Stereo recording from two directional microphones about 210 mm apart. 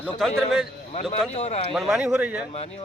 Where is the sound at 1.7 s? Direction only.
Centre (ahead or behind).